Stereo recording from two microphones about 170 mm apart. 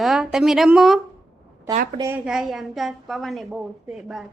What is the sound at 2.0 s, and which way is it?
Speech, 15° right (ahead or behind).